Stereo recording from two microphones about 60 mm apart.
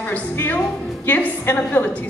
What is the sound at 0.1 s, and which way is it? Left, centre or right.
A woman's voice, left.